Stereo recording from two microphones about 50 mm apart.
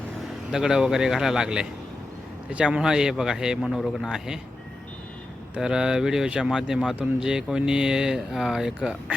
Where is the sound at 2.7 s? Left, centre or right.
Centre.